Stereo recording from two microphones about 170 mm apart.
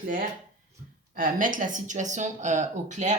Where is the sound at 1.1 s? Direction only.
55° right (ahead or behind).